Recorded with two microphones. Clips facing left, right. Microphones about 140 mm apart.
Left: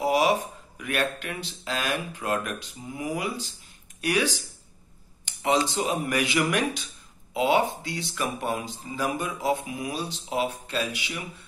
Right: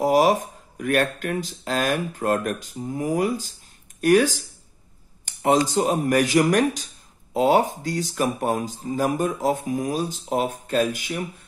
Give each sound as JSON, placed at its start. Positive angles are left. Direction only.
{"t": 0.0, "sound": "speech", "side_deg": -45}